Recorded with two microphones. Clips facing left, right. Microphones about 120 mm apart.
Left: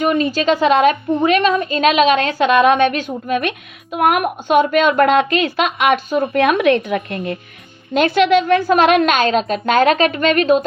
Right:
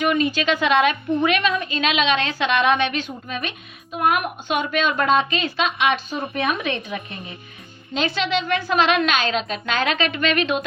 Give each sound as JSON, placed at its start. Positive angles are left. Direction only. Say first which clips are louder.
{"t": 0.0, "sound": "a woman's voice", "louder": "left 4 dB", "side_deg": 40}
{"t": 3.2, "sound": "a woman's voice", "louder": "left 10 dB", "side_deg": 60}
{"t": 7.9, "sound": "a woman's voice", "louder": "left 10 dB", "side_deg": 55}